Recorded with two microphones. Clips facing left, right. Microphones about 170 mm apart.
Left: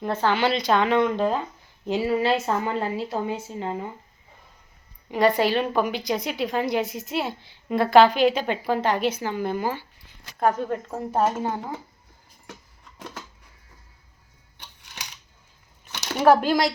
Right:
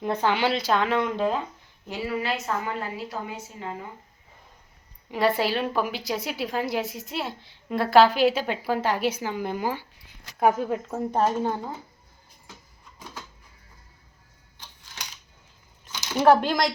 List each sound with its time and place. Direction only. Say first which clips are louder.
0.0 s speech: left 1 dB; 10° right (ahead or behind)
1.9 s a woman's voice: left 7 dB; 30° left (ahead or behind)
5.1 s a woman's voice: left 3 dB; centre (ahead or behind)
16.2 s speech: left 1 dB; 10° left (ahead or behind)